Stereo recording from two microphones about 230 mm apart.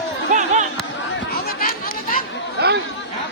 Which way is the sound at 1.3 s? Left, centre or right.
Left.